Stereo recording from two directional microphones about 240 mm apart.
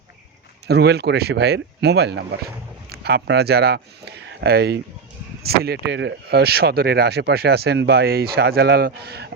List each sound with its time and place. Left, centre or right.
0.7 s speech: right